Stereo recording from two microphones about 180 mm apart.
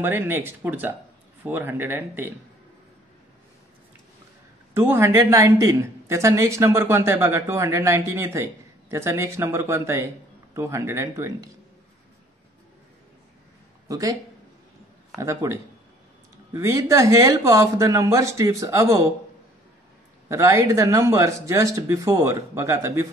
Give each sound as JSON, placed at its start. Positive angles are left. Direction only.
{"t": 0.0, "sound": "speech", "side_deg": -10}
{"t": 4.7, "sound": "speech", "side_deg": -15}
{"t": 13.8, "sound": "speech", "side_deg": -20}
{"t": 15.1, "sound": "speech", "side_deg": -15}
{"t": 20.2, "sound": "speech", "side_deg": -15}